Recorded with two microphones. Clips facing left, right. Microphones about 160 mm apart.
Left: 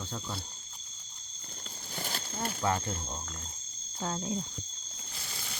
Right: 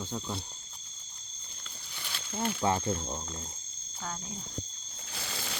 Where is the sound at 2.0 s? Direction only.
45° left (ahead or behind).